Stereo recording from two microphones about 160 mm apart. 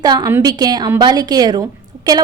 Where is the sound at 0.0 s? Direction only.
25° right (ahead or behind).